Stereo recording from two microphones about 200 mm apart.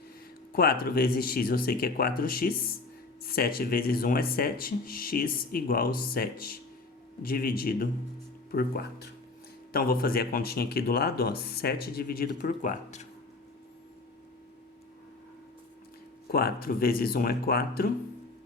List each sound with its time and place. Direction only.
0.5 s speech: 50° left (ahead or behind)
16.3 s speech: 50° left (ahead or behind)